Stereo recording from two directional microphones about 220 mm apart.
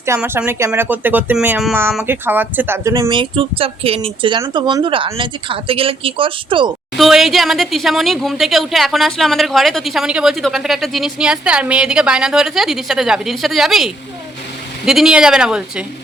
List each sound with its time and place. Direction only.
0.0 s speech: 10° right (ahead or behind)
6.9 s speech: centre (ahead or behind)